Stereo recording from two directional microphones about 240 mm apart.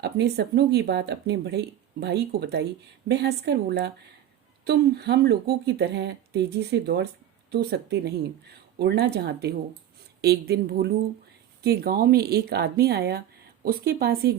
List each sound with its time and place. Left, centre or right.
0.0 s speech: right